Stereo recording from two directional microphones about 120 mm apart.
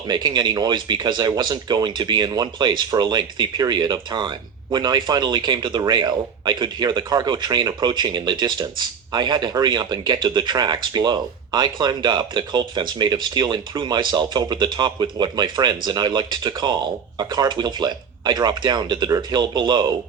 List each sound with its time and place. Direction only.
0.1 s speech: 35° right (ahead or behind)